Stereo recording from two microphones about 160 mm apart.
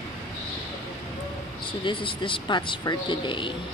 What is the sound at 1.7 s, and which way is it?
Speech, 30° left (ahead or behind).